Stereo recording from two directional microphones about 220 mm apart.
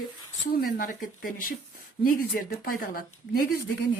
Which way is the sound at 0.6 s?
40° left (ahead or behind).